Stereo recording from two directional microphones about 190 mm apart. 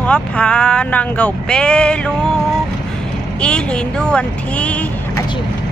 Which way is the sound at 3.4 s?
5° left (ahead or behind).